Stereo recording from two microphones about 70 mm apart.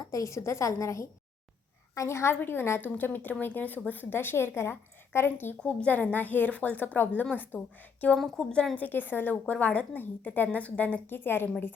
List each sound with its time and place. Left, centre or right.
0.1 s a woman's voice: left
5.5 s a woman's voice: centre
8.1 s a woman's voice: centre
8.7 s a woman's voice: left